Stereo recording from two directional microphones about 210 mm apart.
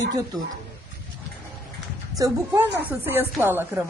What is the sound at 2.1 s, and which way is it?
Speech, 10° right (ahead or behind).